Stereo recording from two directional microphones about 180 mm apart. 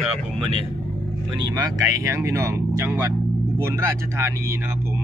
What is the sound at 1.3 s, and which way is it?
A man's voice, 20° right (ahead or behind).